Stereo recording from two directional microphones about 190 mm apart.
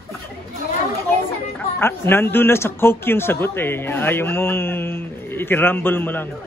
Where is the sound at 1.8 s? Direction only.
10° left (ahead or behind).